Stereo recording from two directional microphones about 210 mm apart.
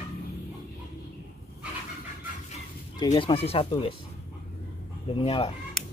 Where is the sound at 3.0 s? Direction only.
25° left (ahead or behind).